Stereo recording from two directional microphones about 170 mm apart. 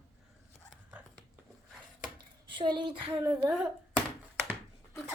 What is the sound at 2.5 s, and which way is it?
Speech, 30° right (ahead or behind).